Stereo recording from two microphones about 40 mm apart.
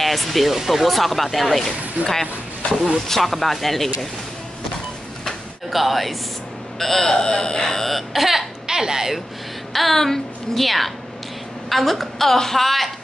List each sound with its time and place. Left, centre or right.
0.0 s speech: centre
5.7 s speech: centre
8.1 s speech: centre
8.6 s speech: centre
9.7 s a woman's voice: centre